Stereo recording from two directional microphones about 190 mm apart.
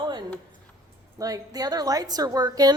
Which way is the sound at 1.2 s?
20° right (ahead or behind).